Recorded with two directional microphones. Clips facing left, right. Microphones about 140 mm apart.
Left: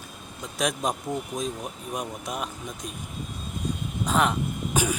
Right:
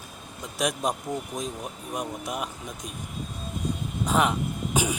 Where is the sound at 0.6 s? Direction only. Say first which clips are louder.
Even; 10° right (ahead or behind).